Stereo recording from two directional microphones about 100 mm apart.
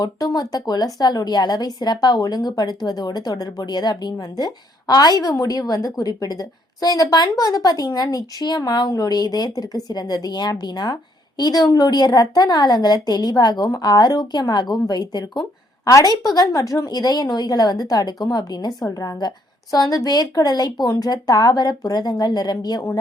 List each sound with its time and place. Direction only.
0.0 s a woman's voice: 40° left (ahead or behind)